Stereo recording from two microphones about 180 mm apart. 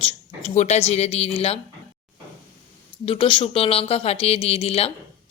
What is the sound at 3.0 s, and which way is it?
Speech, 30° left (ahead or behind).